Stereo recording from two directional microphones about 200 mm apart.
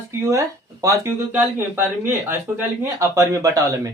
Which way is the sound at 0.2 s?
15° right (ahead or behind).